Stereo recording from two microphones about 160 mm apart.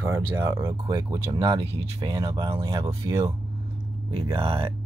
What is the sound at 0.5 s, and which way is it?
Speech, 20° right (ahead or behind).